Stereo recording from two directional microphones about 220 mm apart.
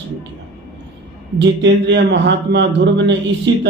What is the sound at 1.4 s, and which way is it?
Speech, 55° right (ahead or behind).